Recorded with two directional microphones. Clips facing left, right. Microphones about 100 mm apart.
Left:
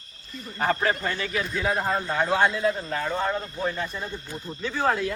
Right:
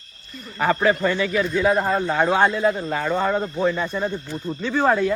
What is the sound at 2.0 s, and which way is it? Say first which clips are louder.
Speech: right 3 dB; 80° right.